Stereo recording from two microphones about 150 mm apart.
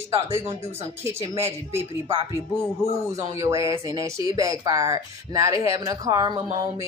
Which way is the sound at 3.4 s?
20° right (ahead or behind).